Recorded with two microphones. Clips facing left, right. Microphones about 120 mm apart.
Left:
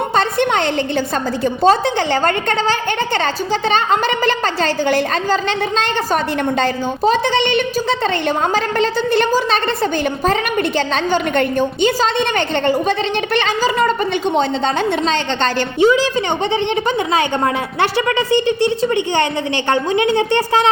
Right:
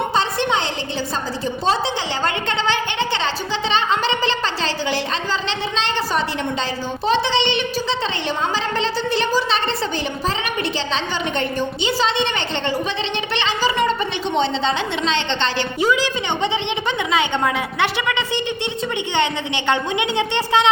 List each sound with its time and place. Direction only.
0.2 s a sound: 55° left (ahead or behind)
1.6 s a woman's voice: 50° left (ahead or behind)
15.8 s a woman's voice: 30° left (ahead or behind)
17.1 s a woman's voice: 40° left (ahead or behind)